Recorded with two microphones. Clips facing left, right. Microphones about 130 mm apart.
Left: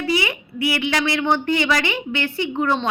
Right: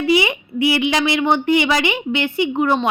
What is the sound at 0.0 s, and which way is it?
A woman's voice, 20° right (ahead or behind).